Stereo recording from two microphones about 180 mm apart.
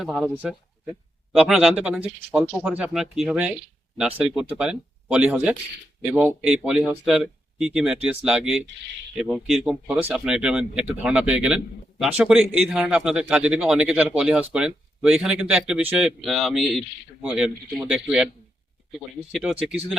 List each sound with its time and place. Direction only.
0.0 s speech: centre (ahead or behind)